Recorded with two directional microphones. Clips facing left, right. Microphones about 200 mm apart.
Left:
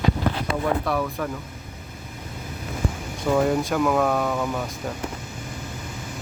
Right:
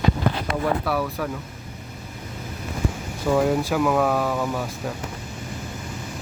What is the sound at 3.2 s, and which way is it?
Speech, 5° right (ahead or behind).